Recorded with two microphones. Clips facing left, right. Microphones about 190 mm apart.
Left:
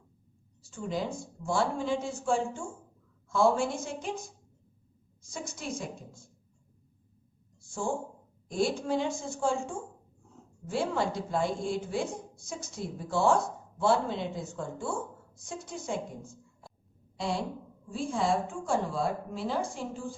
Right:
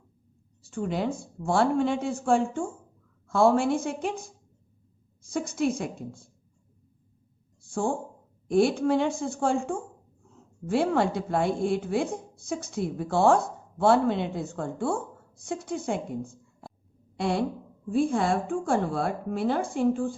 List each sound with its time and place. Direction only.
0.7 s a woman's voice: 60° right (ahead or behind)
5.3 s a woman's voice: 60° right (ahead or behind)
7.7 s a woman's voice: 55° right (ahead or behind)